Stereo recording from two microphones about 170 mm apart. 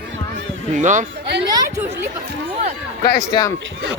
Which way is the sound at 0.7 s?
45° right (ahead or behind).